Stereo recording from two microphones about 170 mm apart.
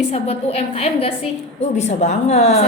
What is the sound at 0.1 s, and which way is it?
A woman's voice, 35° left (ahead or behind).